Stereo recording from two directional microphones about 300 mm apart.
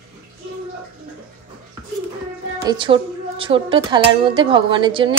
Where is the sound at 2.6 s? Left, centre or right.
Centre.